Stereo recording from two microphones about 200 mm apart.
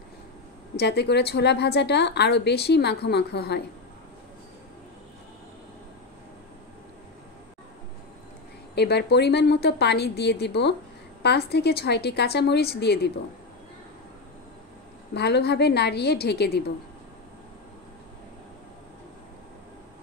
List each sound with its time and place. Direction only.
0.7 s a woman's voice: 55° left (ahead or behind)
8.7 s a woman's voice: 55° left (ahead or behind)
15.1 s a woman's voice: 55° left (ahead or behind)